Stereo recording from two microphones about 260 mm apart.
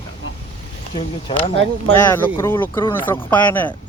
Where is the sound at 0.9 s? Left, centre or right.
Centre.